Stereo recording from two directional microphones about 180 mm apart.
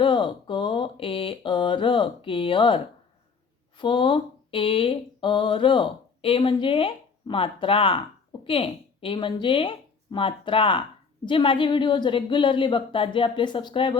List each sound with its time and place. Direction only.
0.0 s mantra: 25° left (ahead or behind)
3.8 s speech: 25° left (ahead or behind)
11.3 s mantra: 30° left (ahead or behind)